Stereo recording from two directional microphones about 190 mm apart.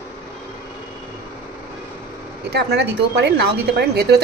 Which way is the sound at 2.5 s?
65° right (ahead or behind).